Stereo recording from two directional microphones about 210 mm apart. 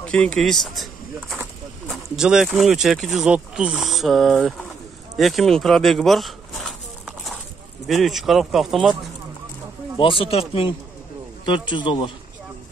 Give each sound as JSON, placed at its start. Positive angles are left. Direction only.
{"t": 0.0, "sound": "speech", "side_deg": 5}
{"t": 1.9, "sound": "speech", "side_deg": -5}
{"t": 5.1, "sound": "a sound", "side_deg": 0}
{"t": 7.8, "sound": "speech", "side_deg": 0}
{"t": 9.9, "sound": "a man's voice", "side_deg": 25}
{"t": 11.4, "sound": "a man's voice", "side_deg": 25}